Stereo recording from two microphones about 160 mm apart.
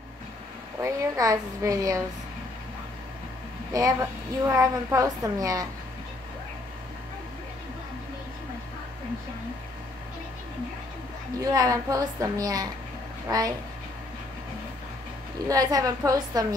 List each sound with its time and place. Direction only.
0.7 s a woman's voice: 20° right (ahead or behind)
3.7 s a woman's voice: 20° right (ahead or behind)
11.4 s a woman's voice: 20° right (ahead or behind)
15.4 s a woman's voice: 20° right (ahead or behind)